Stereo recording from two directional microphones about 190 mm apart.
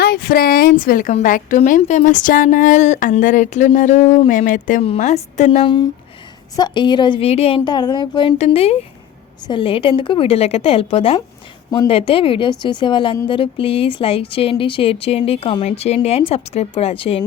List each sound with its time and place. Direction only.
0.0 s a woman's voice: 50° left (ahead or behind); by 5.6 s 35° left (ahead or behind)
6.6 s a woman's voice: 25° left (ahead or behind)